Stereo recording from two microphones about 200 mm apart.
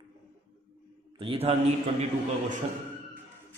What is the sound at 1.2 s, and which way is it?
Speech, 30° right (ahead or behind).